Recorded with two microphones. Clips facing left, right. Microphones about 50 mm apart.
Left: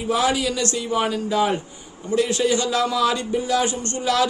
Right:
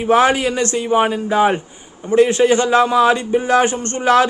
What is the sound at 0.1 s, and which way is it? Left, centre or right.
A man's voice, right.